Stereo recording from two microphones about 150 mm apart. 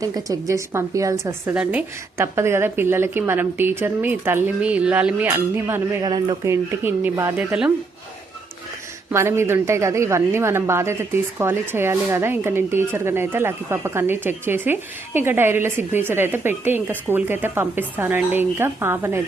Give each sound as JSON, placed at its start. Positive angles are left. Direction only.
{"t": 0.0, "sound": "a woman's voice", "side_deg": -25}
{"t": 6.0, "sound": "a woman's voice", "side_deg": -30}
{"t": 9.1, "sound": "a woman's voice", "side_deg": -15}